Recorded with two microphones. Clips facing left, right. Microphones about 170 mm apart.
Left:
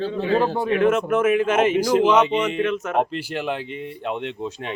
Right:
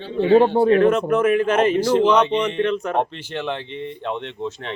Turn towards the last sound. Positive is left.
turn(degrees=10)  # may be behind; listen again after turning